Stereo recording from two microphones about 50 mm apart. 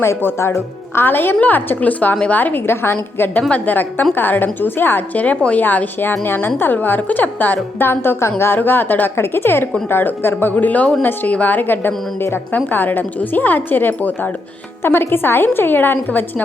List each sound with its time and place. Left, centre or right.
0.3 s a woman's voice: left
5.1 s a woman's voice: left
5.6 s a woman's voice: left